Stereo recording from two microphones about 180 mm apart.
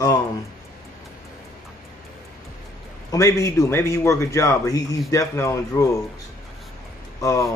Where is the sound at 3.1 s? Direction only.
15° left (ahead or behind).